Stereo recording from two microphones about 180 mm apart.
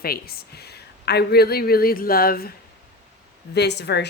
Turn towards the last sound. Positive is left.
turn(degrees=70)  # may be behind; listen again after turning